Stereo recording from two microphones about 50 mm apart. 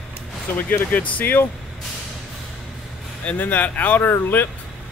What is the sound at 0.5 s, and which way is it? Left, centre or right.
Speech, left.